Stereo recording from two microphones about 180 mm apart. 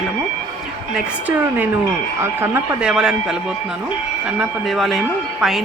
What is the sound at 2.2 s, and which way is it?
Speech, 10° right (ahead or behind).